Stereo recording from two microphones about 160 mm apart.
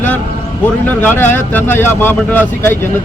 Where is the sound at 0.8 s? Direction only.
10° left (ahead or behind).